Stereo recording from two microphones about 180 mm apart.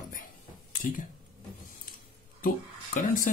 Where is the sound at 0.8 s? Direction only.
45° left (ahead or behind).